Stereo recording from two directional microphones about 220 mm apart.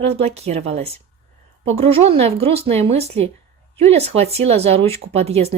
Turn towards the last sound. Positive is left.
turn(degrees=-30)  # may be behind; listen again after turning